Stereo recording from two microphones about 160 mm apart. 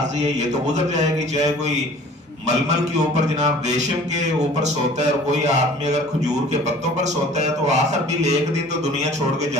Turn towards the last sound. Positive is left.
turn(degrees=-45)  # may be behind; listen again after turning